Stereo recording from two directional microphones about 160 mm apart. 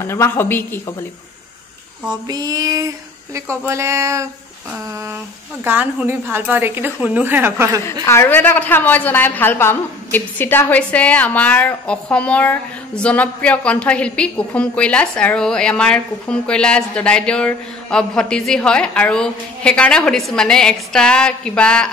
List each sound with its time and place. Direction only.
0.0 s a woman's voice: 15° left (ahead or behind)
2.2 s a sound: 25° right (ahead or behind)
3.3 s a woman's voice: 15° right (ahead or behind)
5.6 s a woman's voice: 10° right (ahead or behind)
8.0 s a woman's voice: 15° left (ahead or behind)